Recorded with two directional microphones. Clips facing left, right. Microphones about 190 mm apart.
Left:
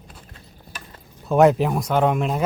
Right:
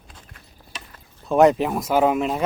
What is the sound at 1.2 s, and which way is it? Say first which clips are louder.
Speech: even; centre (ahead or behind).